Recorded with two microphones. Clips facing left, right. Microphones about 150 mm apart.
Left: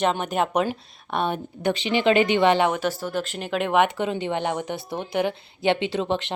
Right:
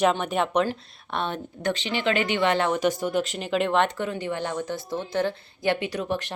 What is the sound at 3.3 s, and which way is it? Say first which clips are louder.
Speech: left 4 dB; centre (ahead or behind).